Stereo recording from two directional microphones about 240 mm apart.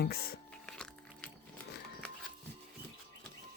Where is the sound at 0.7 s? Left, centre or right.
Centre.